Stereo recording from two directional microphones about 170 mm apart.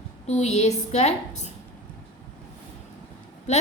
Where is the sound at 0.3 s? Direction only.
40° left (ahead or behind).